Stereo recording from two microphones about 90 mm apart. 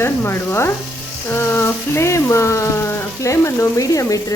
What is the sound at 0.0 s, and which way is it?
Speech, 30° left (ahead or behind).